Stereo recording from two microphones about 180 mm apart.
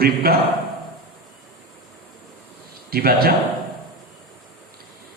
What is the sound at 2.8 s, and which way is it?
Speech, 55° right (ahead or behind).